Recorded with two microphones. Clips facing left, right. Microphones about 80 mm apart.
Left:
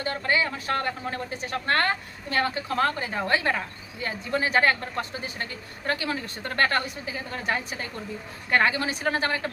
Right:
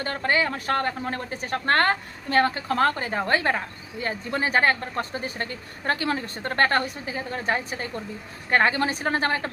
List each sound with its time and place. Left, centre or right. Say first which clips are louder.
0.0 s a woman's voice: right 2 dB; right